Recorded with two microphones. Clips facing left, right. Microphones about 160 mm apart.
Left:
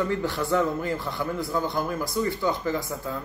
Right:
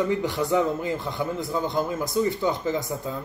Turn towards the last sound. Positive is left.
turn(degrees=-20)  # may be behind; listen again after turning